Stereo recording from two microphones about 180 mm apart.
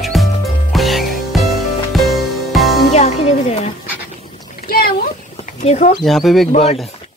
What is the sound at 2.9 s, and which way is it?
Music, 35° left (ahead or behind).